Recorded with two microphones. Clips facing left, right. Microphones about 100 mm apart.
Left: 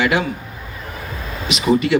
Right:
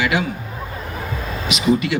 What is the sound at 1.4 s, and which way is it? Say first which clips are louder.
Speech: left 2 dB; 35° left (ahead or behind).